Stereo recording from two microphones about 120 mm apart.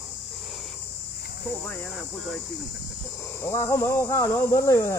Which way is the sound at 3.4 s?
25° left (ahead or behind).